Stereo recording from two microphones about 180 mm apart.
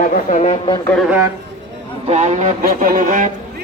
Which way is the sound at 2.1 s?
40° right (ahead or behind).